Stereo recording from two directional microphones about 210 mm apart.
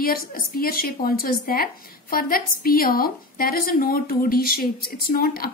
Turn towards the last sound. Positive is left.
turn(degrees=45)  # may be behind; listen again after turning